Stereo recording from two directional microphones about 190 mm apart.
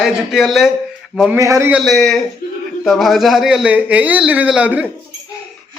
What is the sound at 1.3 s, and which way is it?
Speech, 15° right (ahead or behind).